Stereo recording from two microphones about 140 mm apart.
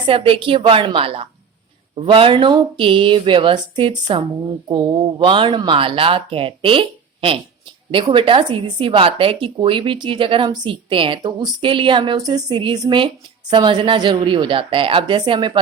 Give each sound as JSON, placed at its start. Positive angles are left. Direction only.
{"t": 0.0, "sound": "speech", "side_deg": -35}